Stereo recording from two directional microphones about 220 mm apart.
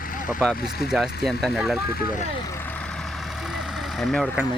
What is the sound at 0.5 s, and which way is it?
Speech, 40° left (ahead or behind).